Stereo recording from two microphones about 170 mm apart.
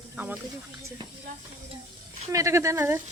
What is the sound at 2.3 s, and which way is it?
Speech, 15° right (ahead or behind).